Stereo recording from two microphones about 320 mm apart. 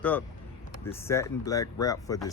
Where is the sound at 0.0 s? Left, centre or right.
Centre.